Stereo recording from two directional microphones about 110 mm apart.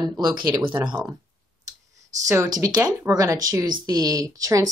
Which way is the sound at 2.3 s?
30° right (ahead or behind).